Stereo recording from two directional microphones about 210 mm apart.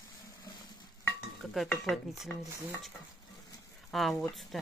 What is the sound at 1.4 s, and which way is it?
Speech, centre (ahead or behind).